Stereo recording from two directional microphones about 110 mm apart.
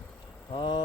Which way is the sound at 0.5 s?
45° left (ahead or behind).